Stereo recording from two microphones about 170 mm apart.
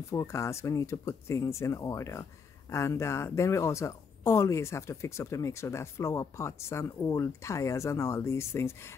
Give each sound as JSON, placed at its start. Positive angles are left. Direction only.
{"t": 0.1, "sound": "speech", "side_deg": 15}